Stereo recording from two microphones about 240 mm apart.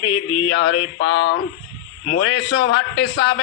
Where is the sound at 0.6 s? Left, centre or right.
Left.